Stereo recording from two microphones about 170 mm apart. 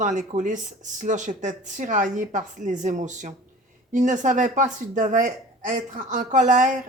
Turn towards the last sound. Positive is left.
turn(degrees=-50)  # may be behind; listen again after turning